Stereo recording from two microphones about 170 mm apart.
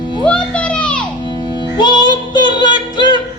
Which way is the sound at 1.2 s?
25° left (ahead or behind).